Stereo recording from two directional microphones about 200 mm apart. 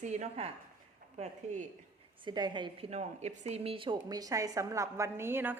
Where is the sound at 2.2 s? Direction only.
20° right (ahead or behind).